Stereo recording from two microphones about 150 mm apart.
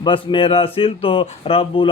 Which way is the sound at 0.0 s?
35° left (ahead or behind).